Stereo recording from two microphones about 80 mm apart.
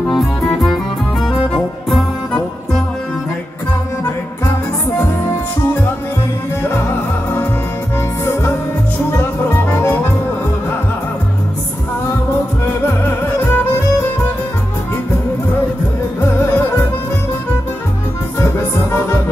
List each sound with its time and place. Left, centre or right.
1.2 s music: centre
9.1 s music: left
12.6 s music: left
16.2 s music: left
18.4 s music: left